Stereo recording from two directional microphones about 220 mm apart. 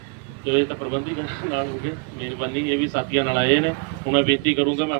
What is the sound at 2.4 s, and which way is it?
Speech, 50° right (ahead or behind).